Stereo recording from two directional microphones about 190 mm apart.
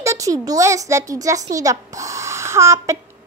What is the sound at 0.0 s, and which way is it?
A child's voice, 15° right (ahead or behind).